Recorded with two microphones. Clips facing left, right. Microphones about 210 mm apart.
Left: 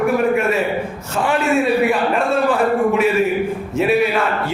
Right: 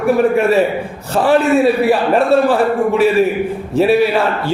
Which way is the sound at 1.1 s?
35° right (ahead or behind).